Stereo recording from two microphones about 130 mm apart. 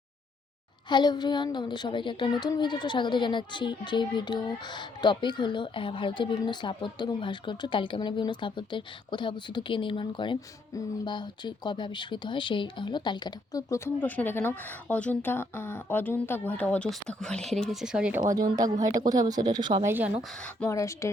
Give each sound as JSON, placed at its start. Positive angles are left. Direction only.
{"t": 0.9, "sound": "a child's voice", "side_deg": 35}
{"t": 18.3, "sound": "speech", "side_deg": -30}
{"t": 19.8, "sound": "speech", "side_deg": -15}
{"t": 20.7, "sound": "speech", "side_deg": 20}